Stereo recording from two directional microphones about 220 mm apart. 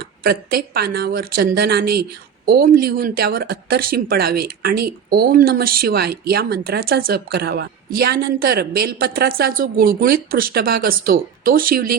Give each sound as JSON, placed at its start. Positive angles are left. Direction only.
{"t": 0.2, "sound": "speech", "side_deg": -45}